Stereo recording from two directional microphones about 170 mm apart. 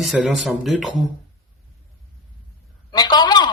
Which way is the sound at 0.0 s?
5° right (ahead or behind).